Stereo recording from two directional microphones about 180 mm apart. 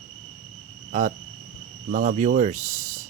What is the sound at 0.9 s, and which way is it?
Speech, 45° right (ahead or behind).